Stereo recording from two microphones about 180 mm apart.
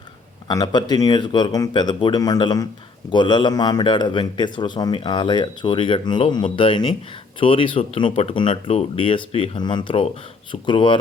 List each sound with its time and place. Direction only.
0.4 s speech: 20° left (ahead or behind)